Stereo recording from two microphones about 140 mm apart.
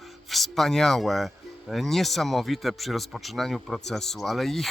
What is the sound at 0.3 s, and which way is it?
Speech, centre (ahead or behind).